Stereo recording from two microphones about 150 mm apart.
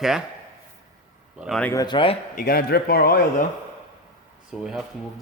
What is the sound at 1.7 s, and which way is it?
Speech, 30° left (ahead or behind).